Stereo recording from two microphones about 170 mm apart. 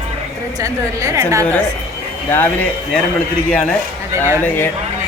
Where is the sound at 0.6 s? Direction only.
20° right (ahead or behind).